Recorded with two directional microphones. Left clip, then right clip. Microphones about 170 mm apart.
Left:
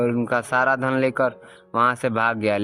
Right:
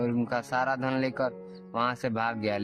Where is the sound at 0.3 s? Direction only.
30° left (ahead or behind).